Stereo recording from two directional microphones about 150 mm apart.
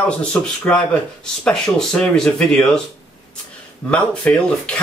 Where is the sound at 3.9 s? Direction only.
10° left (ahead or behind).